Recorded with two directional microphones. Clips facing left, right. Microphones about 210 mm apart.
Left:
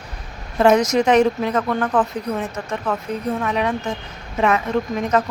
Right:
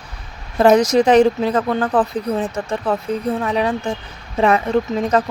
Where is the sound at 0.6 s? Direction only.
35° right (ahead or behind).